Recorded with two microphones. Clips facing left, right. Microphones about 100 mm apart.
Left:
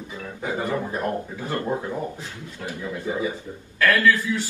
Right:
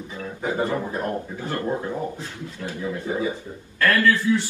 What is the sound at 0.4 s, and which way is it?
Speech, 25° right (ahead or behind).